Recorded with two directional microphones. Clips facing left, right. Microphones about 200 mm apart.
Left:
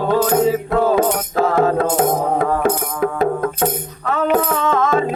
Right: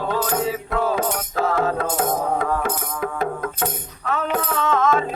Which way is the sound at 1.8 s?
25° left (ahead or behind).